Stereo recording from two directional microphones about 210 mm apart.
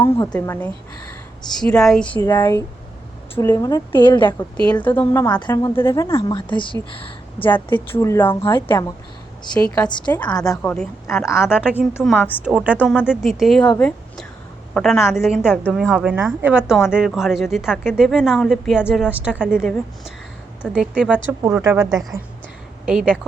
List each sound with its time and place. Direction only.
0.0 s a woman's voice: 10° left (ahead or behind)
2.1 s a woman's voice: 20° left (ahead or behind)
4.7 s a woman's voice: 10° left (ahead or behind)
7.4 s a woman's voice: 10° left (ahead or behind)
10.1 s a woman's voice: 5° left (ahead or behind)
12.0 s speech: 5° left (ahead or behind)
12.4 s a woman's voice: 5° right (ahead or behind)
22.9 s speech: 5° right (ahead or behind)